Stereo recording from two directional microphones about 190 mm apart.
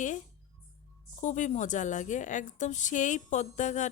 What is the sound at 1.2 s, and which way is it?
A woman's voice, 40° left (ahead or behind).